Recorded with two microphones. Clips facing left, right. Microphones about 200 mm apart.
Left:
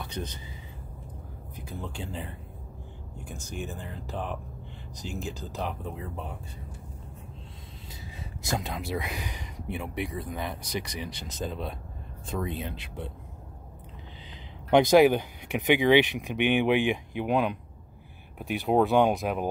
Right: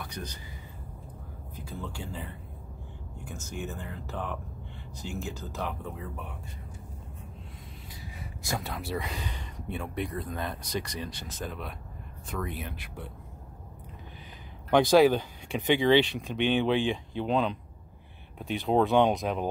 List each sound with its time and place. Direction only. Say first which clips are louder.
0.0 s speech: left 3 dB; 25° left (ahead or behind)
1.6 s speech: left 1 dB; 15° left (ahead or behind)
3.3 s speech: even; 35° left (ahead or behind)
5.2 s speech: left 2 dB; 35° left (ahead or behind)
8.4 s speech: left 3 dB; 20° left (ahead or behind)
14.7 s speech: left 2 dB; 20° left (ahead or behind)